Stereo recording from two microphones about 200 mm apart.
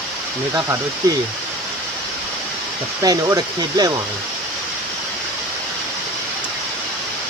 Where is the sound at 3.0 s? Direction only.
15° right (ahead or behind).